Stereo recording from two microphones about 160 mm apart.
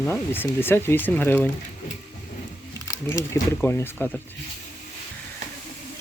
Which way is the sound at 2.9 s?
20° left (ahead or behind).